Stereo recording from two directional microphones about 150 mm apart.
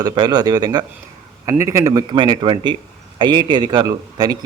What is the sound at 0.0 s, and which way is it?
A man's voice, 30° right (ahead or behind).